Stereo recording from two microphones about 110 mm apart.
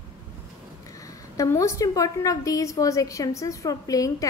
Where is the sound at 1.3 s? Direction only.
30° left (ahead or behind).